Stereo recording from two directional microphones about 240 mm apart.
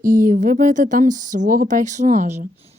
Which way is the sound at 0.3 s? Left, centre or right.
Right.